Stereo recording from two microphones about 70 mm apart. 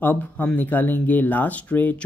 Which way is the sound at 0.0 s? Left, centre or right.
Left.